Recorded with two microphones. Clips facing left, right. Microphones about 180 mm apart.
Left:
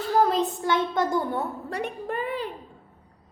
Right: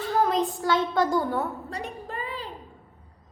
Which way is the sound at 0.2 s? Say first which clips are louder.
Left 2 dB; 35° left (ahead or behind).